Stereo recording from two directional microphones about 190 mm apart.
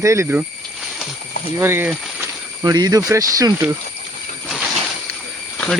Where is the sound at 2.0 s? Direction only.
Centre (ahead or behind).